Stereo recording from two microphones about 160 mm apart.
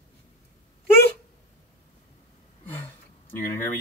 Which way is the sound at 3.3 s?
15° left (ahead or behind).